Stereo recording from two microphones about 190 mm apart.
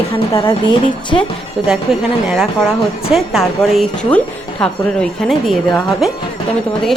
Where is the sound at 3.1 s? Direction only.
Centre (ahead or behind).